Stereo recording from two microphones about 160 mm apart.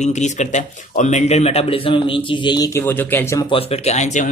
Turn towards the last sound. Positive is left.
turn(degrees=45)  # may be behind; listen again after turning